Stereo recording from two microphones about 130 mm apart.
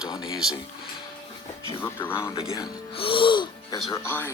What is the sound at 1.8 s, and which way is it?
Speech, 15° left (ahead or behind).